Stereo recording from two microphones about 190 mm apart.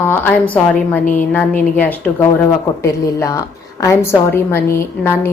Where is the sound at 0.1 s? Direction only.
10° left (ahead or behind).